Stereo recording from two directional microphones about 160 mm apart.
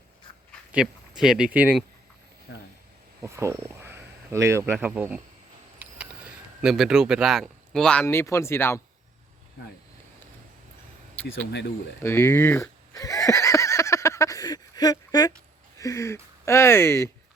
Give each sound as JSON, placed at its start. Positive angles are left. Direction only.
{"t": 0.7, "sound": "speech", "side_deg": -5}
{"t": 2.5, "sound": "speech", "side_deg": 90}
{"t": 3.2, "sound": "speech", "side_deg": -15}
{"t": 6.6, "sound": "speech", "side_deg": -5}
{"t": 8.0, "sound": "speech", "side_deg": 15}
{"t": 11.2, "sound": "speech", "side_deg": 10}
{"t": 12.9, "sound": "a sound", "side_deg": 20}
{"t": 15.8, "sound": "speech", "side_deg": 20}